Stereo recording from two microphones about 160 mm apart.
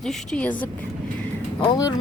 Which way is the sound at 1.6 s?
30° left (ahead or behind).